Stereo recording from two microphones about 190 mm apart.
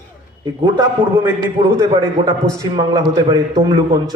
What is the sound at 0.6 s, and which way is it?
A man's voice, 20° right (ahead or behind).